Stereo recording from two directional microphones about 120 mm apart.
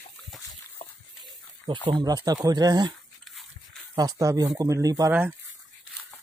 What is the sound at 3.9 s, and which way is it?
Speech, 30° right (ahead or behind).